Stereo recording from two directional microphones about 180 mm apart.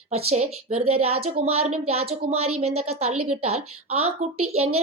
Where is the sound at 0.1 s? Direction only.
35° right (ahead or behind).